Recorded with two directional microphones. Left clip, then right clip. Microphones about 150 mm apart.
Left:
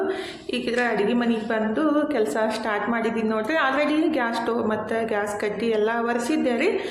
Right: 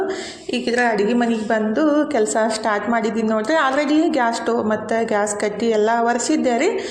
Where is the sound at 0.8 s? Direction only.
40° right (ahead or behind).